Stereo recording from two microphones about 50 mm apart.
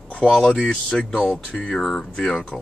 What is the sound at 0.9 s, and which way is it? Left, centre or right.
Speech, centre.